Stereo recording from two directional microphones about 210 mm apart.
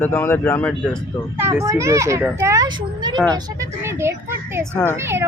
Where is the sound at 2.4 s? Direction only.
15° right (ahead or behind).